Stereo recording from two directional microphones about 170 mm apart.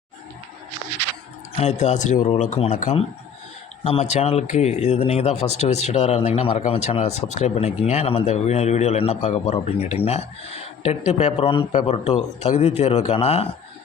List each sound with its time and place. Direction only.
1.5 s a man's voice: 40° left (ahead or behind)